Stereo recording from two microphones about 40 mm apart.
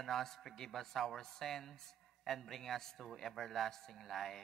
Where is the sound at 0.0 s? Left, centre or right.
Centre.